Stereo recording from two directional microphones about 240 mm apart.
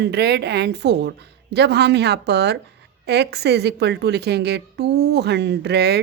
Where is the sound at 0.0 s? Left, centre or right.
Right.